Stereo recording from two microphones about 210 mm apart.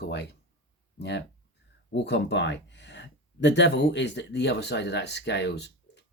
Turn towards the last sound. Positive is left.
turn(degrees=55)  # may be behind; listen again after turning